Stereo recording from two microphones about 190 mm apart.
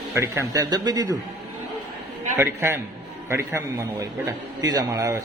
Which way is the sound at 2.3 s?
10° right (ahead or behind).